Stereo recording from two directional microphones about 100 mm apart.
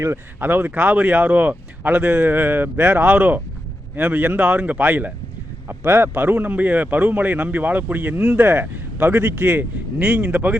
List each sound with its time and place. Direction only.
0.0 s a man's voice: 25° right (ahead or behind)
10.0 s a man's voice: 10° right (ahead or behind)